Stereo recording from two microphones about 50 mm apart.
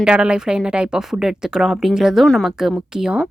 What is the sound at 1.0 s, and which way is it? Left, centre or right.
Speech, centre.